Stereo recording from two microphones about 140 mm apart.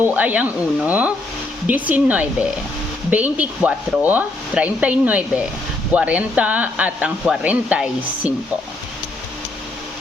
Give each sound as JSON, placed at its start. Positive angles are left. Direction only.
{"t": 0.0, "sound": "speech", "side_deg": -10}